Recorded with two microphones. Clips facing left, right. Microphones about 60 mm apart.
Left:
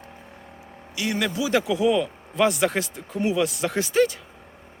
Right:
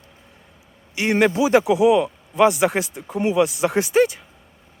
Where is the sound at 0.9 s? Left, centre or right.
Right; by 4.2 s centre.